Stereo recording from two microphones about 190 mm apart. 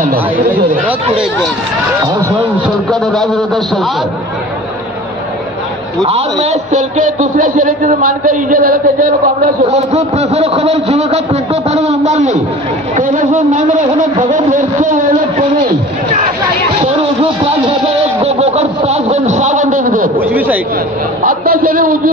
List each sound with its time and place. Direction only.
2.0 s speech: 15° right (ahead or behind)
2.9 s a man's voice: centre (ahead or behind)
6.0 s a man's voice: 35° right (ahead or behind)
9.7 s a man's voice: 35° right (ahead or behind)
18.2 s a man's voice: 35° right (ahead or behind)
20.2 s speech: 10° right (ahead or behind)
21.2 s a man's voice: 45° right (ahead or behind)